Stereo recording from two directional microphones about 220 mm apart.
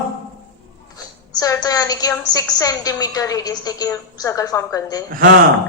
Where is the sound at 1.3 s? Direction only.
15° left (ahead or behind).